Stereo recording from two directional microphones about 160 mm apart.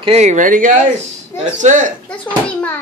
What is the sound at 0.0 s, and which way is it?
Speech, 40° right (ahead or behind).